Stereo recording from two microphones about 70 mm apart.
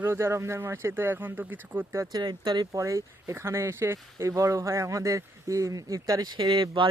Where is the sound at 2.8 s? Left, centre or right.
Right.